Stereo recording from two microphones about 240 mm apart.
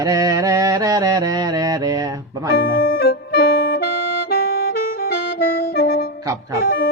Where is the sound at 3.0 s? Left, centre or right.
Left.